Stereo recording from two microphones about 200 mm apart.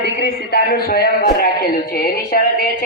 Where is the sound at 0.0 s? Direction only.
55° left (ahead or behind).